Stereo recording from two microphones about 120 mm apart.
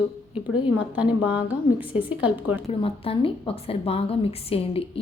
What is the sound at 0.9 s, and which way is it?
A woman's voice, 10° right (ahead or behind).